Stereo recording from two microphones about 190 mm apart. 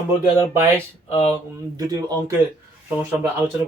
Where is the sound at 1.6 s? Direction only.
20° right (ahead or behind).